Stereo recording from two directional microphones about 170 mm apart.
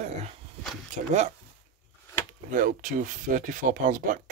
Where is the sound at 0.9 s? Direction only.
45° right (ahead or behind).